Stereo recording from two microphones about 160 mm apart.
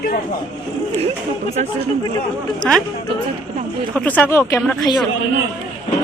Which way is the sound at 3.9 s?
10° left (ahead or behind).